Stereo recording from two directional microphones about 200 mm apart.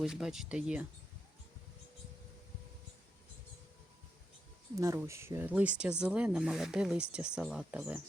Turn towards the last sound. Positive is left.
turn(degrees=-5)  # may be behind; listen again after turning